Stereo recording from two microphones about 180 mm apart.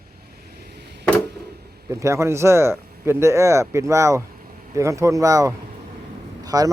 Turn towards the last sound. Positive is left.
turn(degrees=-20)  # may be behind; listen again after turning